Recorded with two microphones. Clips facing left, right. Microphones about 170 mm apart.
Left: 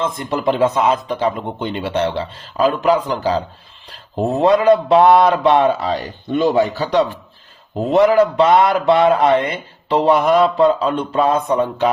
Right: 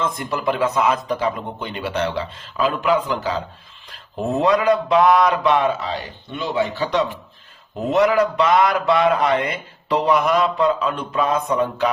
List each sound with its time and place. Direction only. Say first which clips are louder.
0.0 s a man's voice: left 3 dB; 25° left (ahead or behind)